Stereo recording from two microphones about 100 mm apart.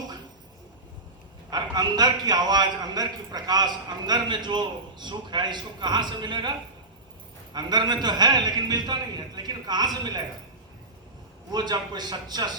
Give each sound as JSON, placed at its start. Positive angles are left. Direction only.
{"t": 1.5, "sound": "a man's voice", "side_deg": -45}
{"t": 11.5, "sound": "a man's voice", "side_deg": -45}